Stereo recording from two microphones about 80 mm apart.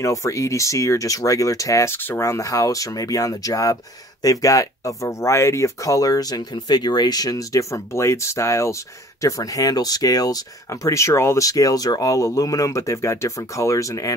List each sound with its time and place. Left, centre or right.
0.0 s speech: left
1.9 s speech: left
2.2 s speech: left
11.4 s speech: left